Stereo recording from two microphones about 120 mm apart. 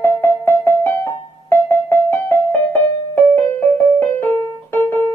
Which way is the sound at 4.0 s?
15° left (ahead or behind).